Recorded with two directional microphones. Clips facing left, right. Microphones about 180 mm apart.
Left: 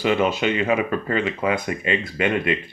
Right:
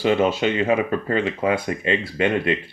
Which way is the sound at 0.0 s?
35° right (ahead or behind).